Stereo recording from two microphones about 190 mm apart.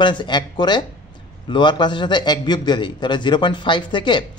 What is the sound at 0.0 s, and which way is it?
A man's voice, 25° left (ahead or behind).